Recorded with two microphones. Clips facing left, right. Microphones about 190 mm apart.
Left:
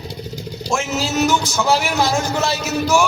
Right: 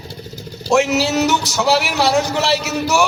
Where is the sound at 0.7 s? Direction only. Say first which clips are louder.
Right 6 dB; 65° right (ahead or behind).